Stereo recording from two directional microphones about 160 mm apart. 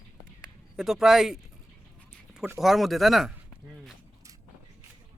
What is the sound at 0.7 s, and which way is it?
Speech, centre (ahead or behind).